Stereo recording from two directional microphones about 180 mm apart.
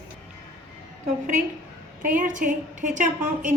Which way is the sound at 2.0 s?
50° right (ahead or behind).